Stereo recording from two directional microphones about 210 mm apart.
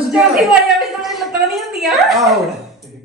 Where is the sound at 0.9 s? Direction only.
Centre (ahead or behind).